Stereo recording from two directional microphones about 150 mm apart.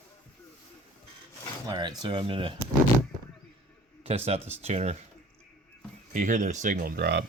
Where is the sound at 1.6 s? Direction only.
25° right (ahead or behind).